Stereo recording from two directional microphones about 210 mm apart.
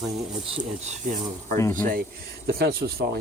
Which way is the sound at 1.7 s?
40° right (ahead or behind).